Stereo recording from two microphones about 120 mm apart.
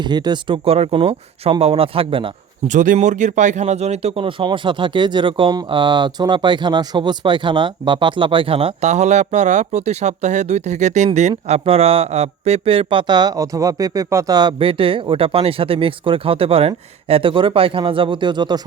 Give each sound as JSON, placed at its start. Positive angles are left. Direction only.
{"t": 0.0, "sound": "speech", "side_deg": -35}
{"t": 2.6, "sound": "speech", "side_deg": -90}
{"t": 14.6, "sound": "speech", "side_deg": -50}